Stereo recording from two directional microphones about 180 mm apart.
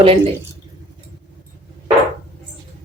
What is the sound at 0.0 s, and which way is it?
Speech, 30° right (ahead or behind).